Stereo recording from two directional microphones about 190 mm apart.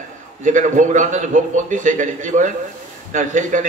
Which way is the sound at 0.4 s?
40° right (ahead or behind).